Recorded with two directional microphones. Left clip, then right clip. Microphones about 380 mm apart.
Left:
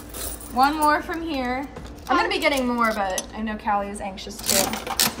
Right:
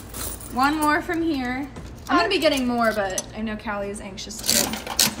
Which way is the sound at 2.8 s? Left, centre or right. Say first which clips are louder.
Even; centre.